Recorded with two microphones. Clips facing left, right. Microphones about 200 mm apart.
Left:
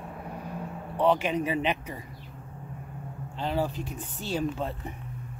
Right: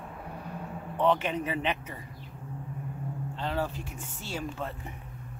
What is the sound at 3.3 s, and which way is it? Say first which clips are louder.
Speech: left 4 dB; 15° left (ahead or behind).